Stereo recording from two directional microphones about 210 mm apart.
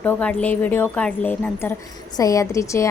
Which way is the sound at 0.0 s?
10° left (ahead or behind).